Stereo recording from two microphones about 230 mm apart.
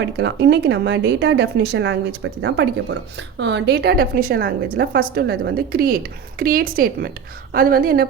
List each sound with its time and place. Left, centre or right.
0.0 s a woman's voice: right